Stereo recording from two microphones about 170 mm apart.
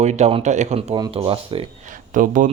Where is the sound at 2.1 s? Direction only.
50° right (ahead or behind).